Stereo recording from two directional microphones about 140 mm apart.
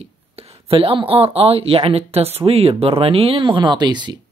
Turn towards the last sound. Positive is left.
turn(degrees=-30)  # may be behind; listen again after turning